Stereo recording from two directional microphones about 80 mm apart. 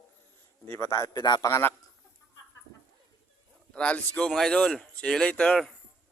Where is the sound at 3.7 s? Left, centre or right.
Centre.